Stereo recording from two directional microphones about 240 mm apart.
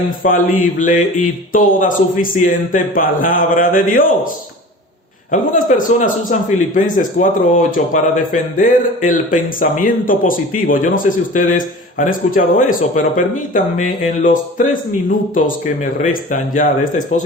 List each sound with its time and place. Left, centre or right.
0.2 s a man's voice: left
5.3 s a man's voice: left